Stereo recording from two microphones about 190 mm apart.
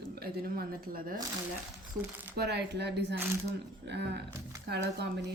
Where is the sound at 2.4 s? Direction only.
60° right (ahead or behind).